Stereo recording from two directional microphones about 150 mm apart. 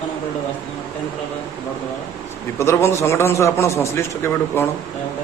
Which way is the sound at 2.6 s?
20° left (ahead or behind).